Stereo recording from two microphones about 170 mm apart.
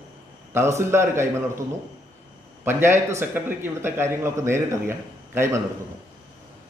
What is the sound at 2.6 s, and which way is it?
A man's voice, 15° right (ahead or behind).